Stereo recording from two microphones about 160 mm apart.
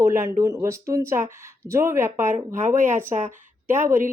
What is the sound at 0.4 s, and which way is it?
A woman's voice, 20° right (ahead or behind).